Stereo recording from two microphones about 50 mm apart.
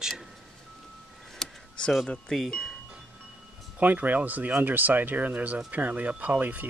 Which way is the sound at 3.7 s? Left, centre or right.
Right.